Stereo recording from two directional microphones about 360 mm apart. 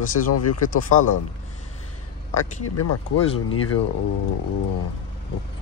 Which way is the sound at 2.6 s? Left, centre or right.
Left.